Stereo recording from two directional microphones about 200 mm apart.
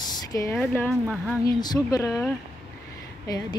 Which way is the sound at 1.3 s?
20° left (ahead or behind).